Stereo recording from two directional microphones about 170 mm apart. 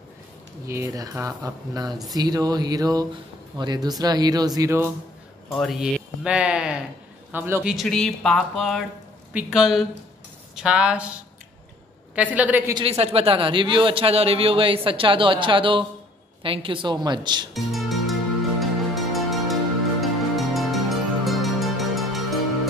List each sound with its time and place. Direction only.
0.7 s speech: 20° right (ahead or behind)
5.5 s a woman's voice: centre (ahead or behind)
7.7 s speech: centre (ahead or behind)
12.2 s a woman's voice: 10° right (ahead or behind)
12.7 s a man's voice: 35° right (ahead or behind)
17.6 s music: centre (ahead or behind)